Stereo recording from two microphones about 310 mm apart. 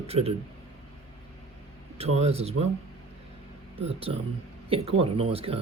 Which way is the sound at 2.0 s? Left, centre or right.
Right.